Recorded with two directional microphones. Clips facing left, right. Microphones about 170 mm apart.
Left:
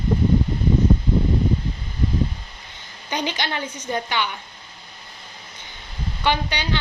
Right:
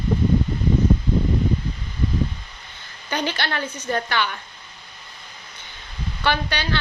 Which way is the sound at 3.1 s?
15° left (ahead or behind).